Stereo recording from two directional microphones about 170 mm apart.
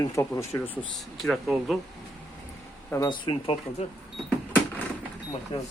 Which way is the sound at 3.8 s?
40° left (ahead or behind).